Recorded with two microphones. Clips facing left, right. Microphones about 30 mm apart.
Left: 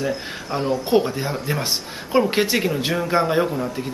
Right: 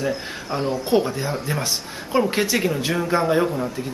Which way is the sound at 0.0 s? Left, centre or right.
Centre.